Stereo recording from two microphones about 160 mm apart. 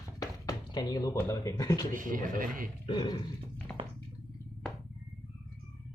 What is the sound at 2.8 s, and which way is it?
Speech, 30° left (ahead or behind).